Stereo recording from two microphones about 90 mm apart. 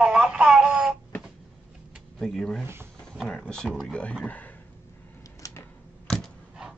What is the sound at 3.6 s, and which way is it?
Speech, centre (ahead or behind).